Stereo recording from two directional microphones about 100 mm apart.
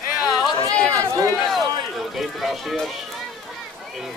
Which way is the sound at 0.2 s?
Centre (ahead or behind).